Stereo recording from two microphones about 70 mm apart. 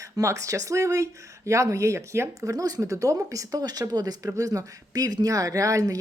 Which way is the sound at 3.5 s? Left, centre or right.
Right.